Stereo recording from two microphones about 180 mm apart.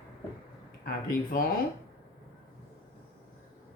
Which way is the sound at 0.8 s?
55° left (ahead or behind).